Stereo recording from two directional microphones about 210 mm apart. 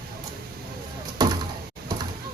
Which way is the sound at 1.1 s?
20° right (ahead or behind).